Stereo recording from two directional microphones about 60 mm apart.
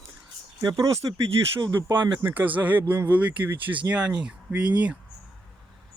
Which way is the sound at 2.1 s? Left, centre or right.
Right.